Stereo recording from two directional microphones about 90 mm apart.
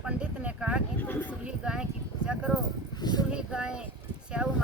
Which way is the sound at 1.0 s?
20° left (ahead or behind).